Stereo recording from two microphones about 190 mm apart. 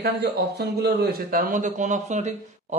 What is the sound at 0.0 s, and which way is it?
Speech, 60° right (ahead or behind).